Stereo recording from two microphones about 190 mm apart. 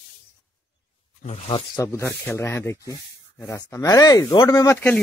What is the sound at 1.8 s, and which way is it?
Speech, 15° left (ahead or behind).